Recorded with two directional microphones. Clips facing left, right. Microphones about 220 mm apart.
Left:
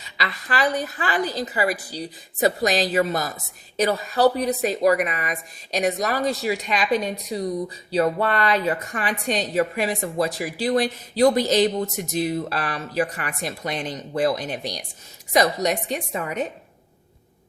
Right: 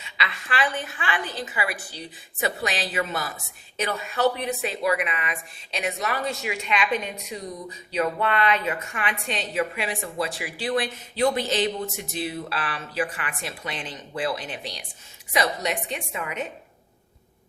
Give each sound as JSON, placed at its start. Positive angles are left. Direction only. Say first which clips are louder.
{"t": 0.0, "sound": "a woman's voice", "louder": "left 3 dB", "side_deg": 40}